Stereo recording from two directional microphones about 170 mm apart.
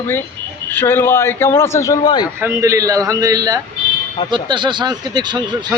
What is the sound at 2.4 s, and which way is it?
Speech, 15° right (ahead or behind).